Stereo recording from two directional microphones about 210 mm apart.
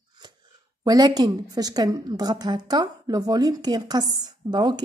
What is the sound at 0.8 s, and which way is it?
Speech, 20° right (ahead or behind).